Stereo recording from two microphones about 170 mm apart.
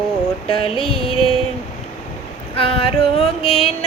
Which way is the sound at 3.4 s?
Centre (ahead or behind).